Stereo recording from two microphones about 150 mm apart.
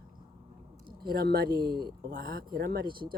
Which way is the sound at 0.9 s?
90° right.